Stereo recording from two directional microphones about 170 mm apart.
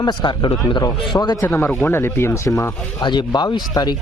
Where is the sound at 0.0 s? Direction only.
25° left (ahead or behind).